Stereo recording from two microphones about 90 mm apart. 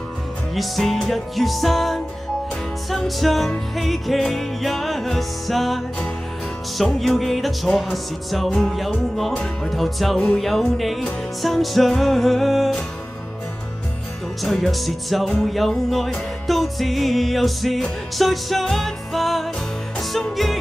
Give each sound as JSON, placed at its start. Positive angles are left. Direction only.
{"t": 0.6, "sound": "music", "side_deg": 0}
{"t": 14.4, "sound": "music", "side_deg": 0}